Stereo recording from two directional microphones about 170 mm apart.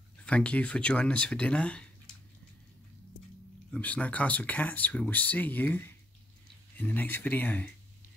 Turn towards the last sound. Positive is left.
turn(degrees=10)  # may be behind; listen again after turning